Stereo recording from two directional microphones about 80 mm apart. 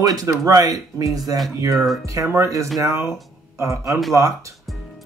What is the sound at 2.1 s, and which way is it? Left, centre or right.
Speech, right.